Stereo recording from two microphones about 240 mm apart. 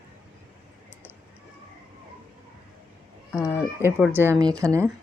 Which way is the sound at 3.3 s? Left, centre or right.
Centre.